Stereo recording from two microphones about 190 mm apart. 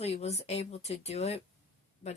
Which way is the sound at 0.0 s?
35° left (ahead or behind).